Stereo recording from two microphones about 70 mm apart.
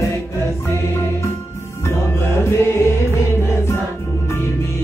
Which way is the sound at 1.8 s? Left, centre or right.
Left.